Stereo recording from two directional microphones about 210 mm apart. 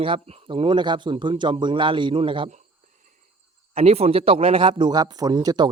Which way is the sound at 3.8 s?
30° right (ahead or behind).